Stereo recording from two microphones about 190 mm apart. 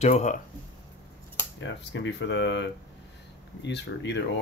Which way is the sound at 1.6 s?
65° left (ahead or behind).